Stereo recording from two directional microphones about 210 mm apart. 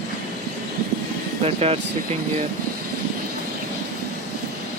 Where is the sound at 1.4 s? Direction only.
30° right (ahead or behind).